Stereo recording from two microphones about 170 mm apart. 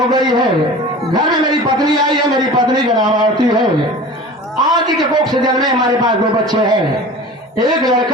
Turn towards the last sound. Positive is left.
turn(degrees=-25)  # may be behind; listen again after turning